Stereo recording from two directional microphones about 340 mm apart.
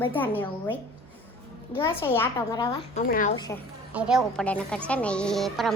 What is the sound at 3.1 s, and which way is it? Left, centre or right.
Speech, left.